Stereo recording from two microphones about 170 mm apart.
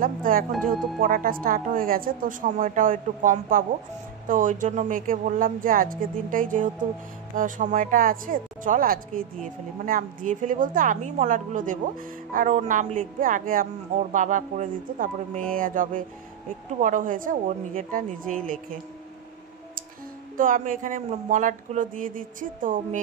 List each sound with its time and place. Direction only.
0.0 s a woman's voice: 55° right (ahead or behind)
20.3 s speech: 50° right (ahead or behind)